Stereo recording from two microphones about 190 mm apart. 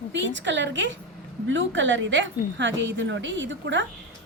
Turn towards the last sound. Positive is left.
turn(degrees=-75)  # may be behind; listen again after turning